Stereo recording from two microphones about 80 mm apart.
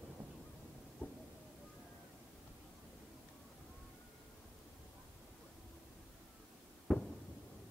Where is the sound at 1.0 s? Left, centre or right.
Centre.